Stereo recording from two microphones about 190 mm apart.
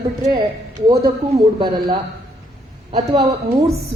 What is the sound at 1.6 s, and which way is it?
A man's voice, 30° right (ahead or behind).